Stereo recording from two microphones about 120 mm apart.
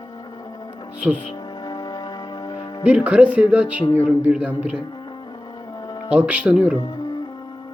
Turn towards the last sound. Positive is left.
turn(degrees=-10)  # may be behind; listen again after turning